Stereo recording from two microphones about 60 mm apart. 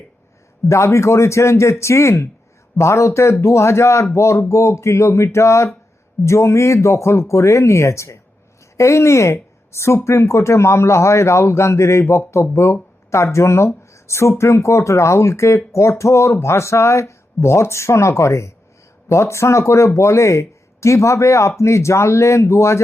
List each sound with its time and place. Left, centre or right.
0.7 s speech: left